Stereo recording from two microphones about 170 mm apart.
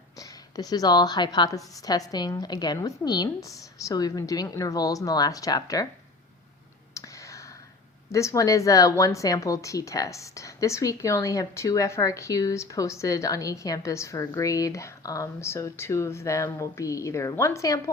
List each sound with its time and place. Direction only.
0.2 s speech: 20° left (ahead or behind)
6.9 s a sound: 20° left (ahead or behind)
8.1 s speech: 20° left (ahead or behind)